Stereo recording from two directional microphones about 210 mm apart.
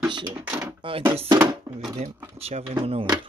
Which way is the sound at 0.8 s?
25° right (ahead or behind).